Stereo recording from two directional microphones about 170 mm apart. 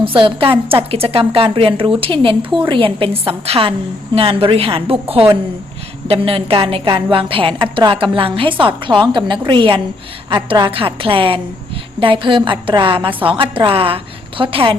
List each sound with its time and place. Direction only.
0.0 s a woman's voice: 30° right (ahead or behind)